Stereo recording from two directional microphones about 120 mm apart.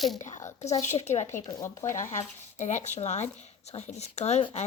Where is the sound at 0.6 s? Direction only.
70° left (ahead or behind).